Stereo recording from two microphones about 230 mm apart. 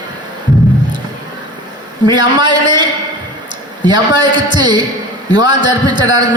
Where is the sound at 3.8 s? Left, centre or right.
Centre.